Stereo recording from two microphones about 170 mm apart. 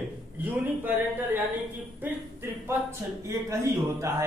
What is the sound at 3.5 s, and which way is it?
Speech, 15° right (ahead or behind).